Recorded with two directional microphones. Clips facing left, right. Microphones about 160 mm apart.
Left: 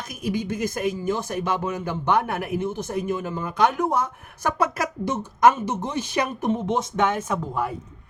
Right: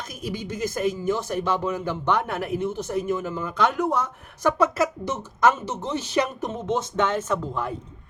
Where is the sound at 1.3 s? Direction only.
15° left (ahead or behind).